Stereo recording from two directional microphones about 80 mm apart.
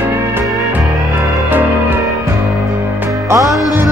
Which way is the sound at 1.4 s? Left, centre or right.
Right.